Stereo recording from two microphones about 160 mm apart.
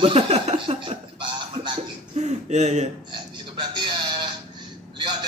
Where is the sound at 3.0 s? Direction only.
30° right (ahead or behind).